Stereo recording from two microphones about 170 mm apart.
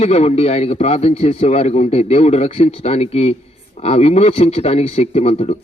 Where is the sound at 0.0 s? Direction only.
40° left (ahead or behind).